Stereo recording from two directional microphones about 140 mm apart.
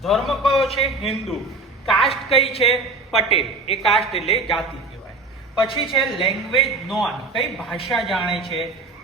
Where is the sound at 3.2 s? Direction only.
45° left (ahead or behind).